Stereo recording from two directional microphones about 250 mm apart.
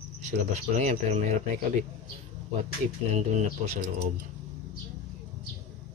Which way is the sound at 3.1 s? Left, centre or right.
Right.